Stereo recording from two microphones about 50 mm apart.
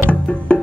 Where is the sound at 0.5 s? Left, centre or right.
Left.